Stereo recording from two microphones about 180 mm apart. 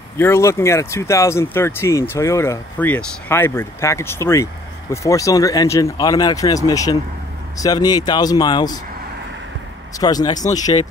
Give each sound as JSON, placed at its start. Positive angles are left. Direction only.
{"t": 0.2, "sound": "speech", "side_deg": 15}
{"t": 9.9, "sound": "speech", "side_deg": 20}